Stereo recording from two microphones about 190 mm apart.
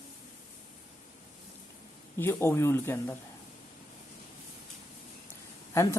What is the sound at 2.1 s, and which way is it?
Speech, 15° left (ahead or behind).